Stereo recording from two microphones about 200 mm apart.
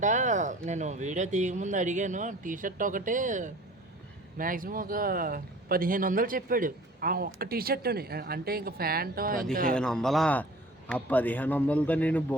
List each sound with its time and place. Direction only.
0.0 s speech: 40° right (ahead or behind)
9.7 s a man's voice: 5° left (ahead or behind)